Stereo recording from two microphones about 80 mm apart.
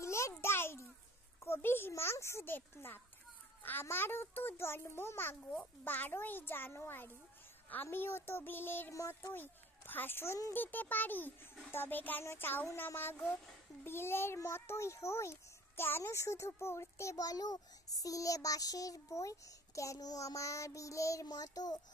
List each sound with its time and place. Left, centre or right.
0.0 s a sound: left
1.4 s a child's voice: left
8.9 s a child's voice: left
9.3 s speech: left
10.5 s a child's voice: left